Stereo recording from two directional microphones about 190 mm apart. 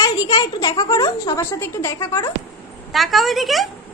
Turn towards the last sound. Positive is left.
turn(degrees=0)  # may be behind; listen again after turning